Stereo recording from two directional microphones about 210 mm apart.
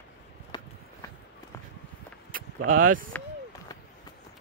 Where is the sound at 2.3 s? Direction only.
40° right (ahead or behind).